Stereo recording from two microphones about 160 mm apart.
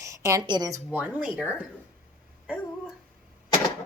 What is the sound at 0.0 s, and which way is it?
Speech, 20° right (ahead or behind).